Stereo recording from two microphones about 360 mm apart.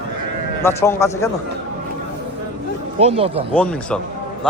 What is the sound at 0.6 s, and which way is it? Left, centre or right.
Speech, centre.